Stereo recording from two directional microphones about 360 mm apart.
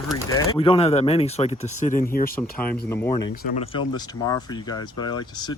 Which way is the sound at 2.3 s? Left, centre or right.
Centre.